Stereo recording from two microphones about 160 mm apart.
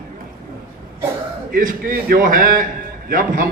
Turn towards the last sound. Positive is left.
turn(degrees=-60)  # may be behind; listen again after turning